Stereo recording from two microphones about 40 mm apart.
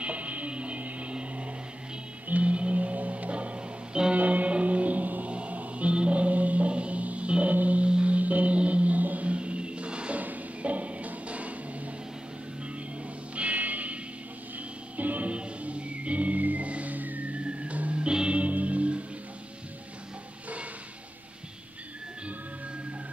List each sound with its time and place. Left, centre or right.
0.0 s music: right
4.1 s music: right
10.2 s music: right
13.3 s music: right
15.0 s music: right
15.3 s music: right